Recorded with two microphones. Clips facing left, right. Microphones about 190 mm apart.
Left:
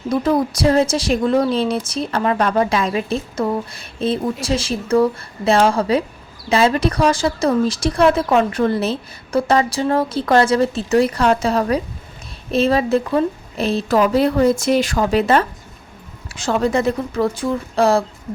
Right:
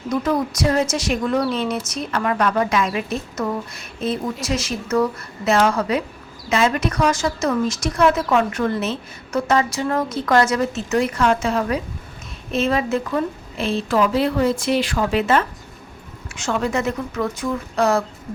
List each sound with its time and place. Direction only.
0.1 s a woman's voice: 30° left (ahead or behind)